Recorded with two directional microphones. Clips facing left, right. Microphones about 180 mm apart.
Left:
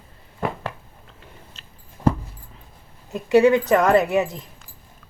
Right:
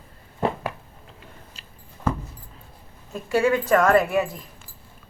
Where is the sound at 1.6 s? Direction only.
10° right (ahead or behind).